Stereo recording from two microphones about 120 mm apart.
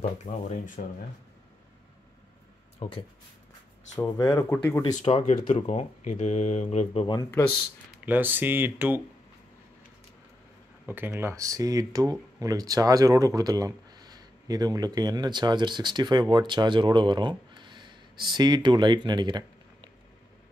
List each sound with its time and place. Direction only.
0.2 s speech: 90° left
2.8 s speech: 65° left (ahead or behind)
4.2 s speech: 30° left (ahead or behind)
4.5 s speech: 15° left (ahead or behind)
4.9 s speech: 80° left; by 7.1 s 60° left (ahead or behind)
7.4 s speech: 30° left (ahead or behind)
8.0 s speech: 15° right (ahead or behind)
10.9 s speech: 20° right (ahead or behind); by 19.9 s 40° right (ahead or behind)